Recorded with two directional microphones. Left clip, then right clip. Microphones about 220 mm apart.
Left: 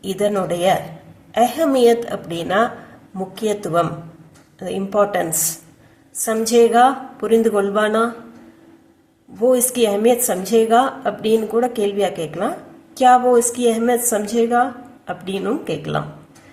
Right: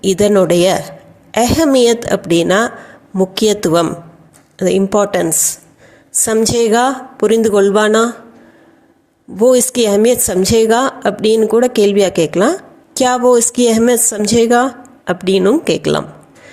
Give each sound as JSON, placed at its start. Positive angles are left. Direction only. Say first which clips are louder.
{"t": 0.0, "sound": "a woman's voice", "louder": "right 9 dB", "side_deg": -40}
{"t": 9.5, "sound": "a woman's voice", "louder": "right 4 dB", "side_deg": -40}